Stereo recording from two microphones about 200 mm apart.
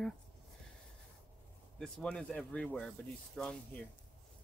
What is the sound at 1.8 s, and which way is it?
Speech, 5° left (ahead or behind).